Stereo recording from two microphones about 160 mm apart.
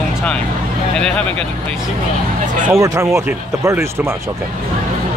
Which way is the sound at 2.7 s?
20° right (ahead or behind).